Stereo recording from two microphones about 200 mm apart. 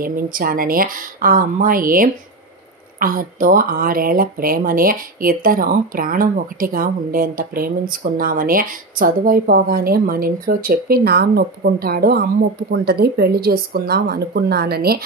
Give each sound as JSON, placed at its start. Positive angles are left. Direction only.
{"t": 0.0, "sound": "speech", "side_deg": -45}